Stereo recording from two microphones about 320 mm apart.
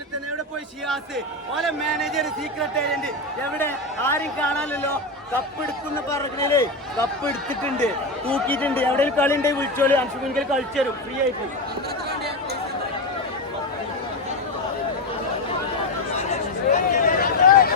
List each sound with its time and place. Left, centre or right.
1.5 s speech: centre
6.1 s speech: centre
8.3 s speech: centre
16.3 s a sound: left